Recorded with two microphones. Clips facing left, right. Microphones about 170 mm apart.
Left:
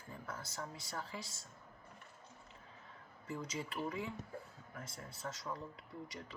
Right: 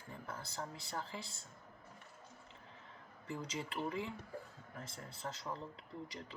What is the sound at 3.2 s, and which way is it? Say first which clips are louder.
Speech: even; 30° right (ahead or behind).